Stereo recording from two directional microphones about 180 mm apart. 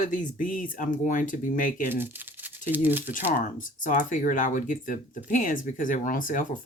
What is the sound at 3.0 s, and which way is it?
Speech, 45° left (ahead or behind).